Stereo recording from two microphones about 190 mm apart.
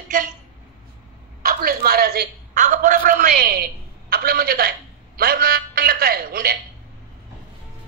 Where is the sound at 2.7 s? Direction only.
45° right (ahead or behind).